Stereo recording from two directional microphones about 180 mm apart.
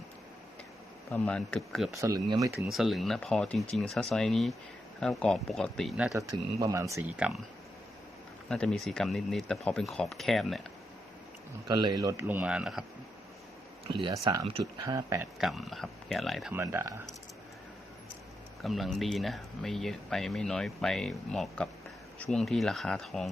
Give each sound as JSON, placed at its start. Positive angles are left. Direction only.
{"t": 1.1, "sound": "speech", "side_deg": 5}
{"t": 1.9, "sound": "speech", "side_deg": -20}
{"t": 2.6, "sound": "speech", "side_deg": 0}
{"t": 6.1, "sound": "speech", "side_deg": -15}
{"t": 8.4, "sound": "speech", "side_deg": 5}
{"t": 11.7, "sound": "speech", "side_deg": -25}
{"t": 13.8, "sound": "speech", "side_deg": -30}
{"t": 15.4, "sound": "speech", "side_deg": 0}
{"t": 16.6, "sound": "speech", "side_deg": -15}
{"t": 18.6, "sound": "speech", "side_deg": 0}